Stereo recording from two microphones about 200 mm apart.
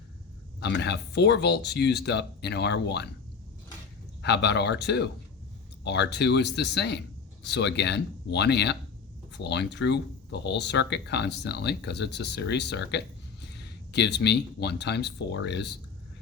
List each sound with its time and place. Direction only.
0.6 s speech: 55° left (ahead or behind)
4.2 s speech: 60° left (ahead or behind)